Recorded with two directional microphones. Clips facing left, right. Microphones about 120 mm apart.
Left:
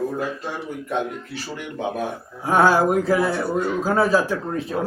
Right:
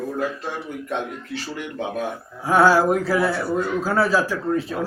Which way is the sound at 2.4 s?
20° left (ahead or behind).